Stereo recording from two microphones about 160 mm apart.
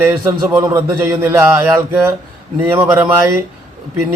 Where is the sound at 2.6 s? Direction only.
15° right (ahead or behind).